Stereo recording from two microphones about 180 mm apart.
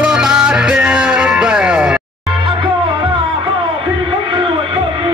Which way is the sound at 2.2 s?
25° right (ahead or behind).